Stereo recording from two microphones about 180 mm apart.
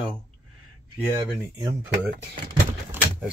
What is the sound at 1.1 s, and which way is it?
Speech, 25° right (ahead or behind).